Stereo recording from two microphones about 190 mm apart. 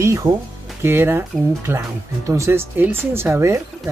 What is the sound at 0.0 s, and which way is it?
Speech, 15° right (ahead or behind).